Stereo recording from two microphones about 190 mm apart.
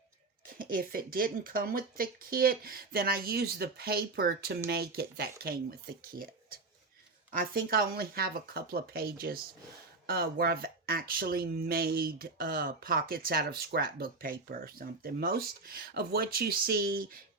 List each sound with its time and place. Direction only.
0.4 s speech: 45° right (ahead or behind)